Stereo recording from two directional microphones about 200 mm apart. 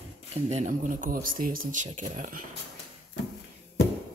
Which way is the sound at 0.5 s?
35° right (ahead or behind).